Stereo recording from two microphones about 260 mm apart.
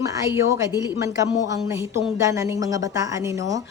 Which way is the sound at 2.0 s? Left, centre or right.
Centre.